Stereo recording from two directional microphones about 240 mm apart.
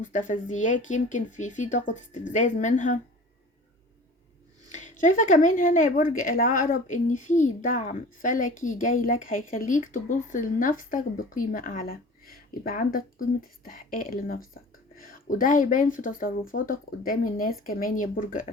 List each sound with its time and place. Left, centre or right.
0.0 s speech: left
4.7 s speech: left